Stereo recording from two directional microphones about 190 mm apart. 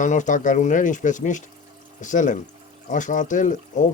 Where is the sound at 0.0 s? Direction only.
40° left (ahead or behind).